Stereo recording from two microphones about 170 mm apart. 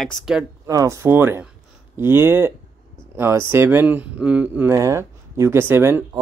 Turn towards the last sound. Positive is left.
turn(degrees=-15)  # may be behind; listen again after turning